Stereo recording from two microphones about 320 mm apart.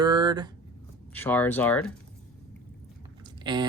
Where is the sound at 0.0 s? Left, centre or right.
Centre.